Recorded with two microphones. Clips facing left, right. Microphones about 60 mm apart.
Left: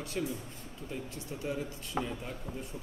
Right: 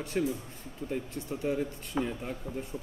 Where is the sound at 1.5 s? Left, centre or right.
Right.